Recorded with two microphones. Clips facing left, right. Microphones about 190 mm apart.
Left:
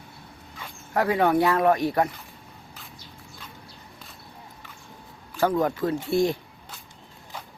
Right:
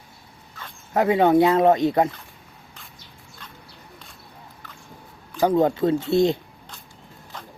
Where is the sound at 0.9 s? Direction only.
20° right (ahead or behind).